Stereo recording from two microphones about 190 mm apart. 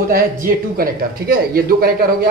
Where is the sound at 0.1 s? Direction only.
50° right (ahead or behind).